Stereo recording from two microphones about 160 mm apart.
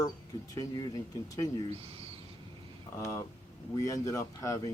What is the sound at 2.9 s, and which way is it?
Speech, 20° left (ahead or behind).